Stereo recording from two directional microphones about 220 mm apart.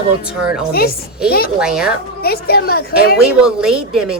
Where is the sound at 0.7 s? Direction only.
45° left (ahead or behind).